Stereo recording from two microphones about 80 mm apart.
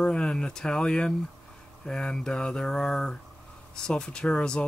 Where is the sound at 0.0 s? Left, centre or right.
Centre.